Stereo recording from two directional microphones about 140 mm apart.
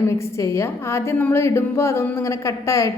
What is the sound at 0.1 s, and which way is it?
A woman's voice, 20° left (ahead or behind).